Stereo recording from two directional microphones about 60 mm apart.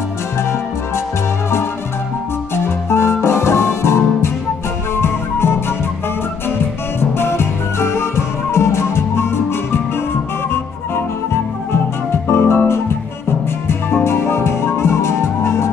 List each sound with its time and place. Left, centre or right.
0.4 s music: left
2.5 s music: left
4.9 s flute: left
7.0 s music: left
11.7 s music: left